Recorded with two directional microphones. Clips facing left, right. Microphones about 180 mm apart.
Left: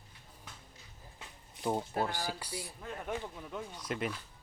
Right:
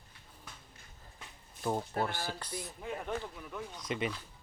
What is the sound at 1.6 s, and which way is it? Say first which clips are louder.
Speech: even; 15° left (ahead or behind).